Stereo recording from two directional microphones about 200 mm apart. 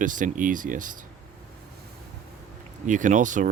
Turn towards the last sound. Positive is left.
turn(degrees=-40)  # may be behind; listen again after turning